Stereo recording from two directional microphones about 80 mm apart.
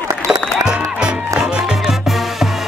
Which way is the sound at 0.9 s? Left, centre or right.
Centre.